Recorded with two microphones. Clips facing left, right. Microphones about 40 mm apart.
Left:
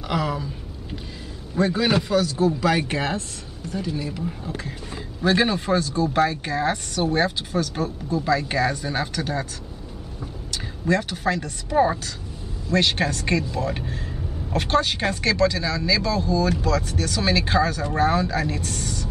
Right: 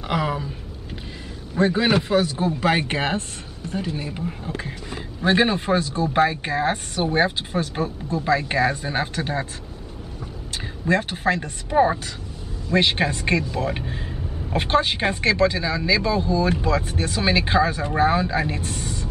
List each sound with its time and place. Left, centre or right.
0.1 s speech: right
1.7 s speech: centre
10.5 s speech: right
11.7 s a woman's voice: centre